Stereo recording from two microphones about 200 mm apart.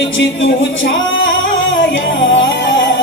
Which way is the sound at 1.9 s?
65° left (ahead or behind).